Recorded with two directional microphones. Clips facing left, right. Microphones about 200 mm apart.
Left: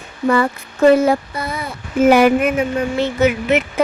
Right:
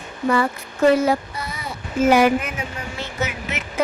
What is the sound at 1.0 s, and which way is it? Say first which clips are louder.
Speech: left 4 dB; 55° left (ahead or behind).